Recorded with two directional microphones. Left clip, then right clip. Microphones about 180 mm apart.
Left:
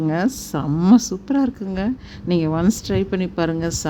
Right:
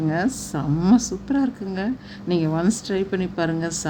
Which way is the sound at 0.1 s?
40° left (ahead or behind).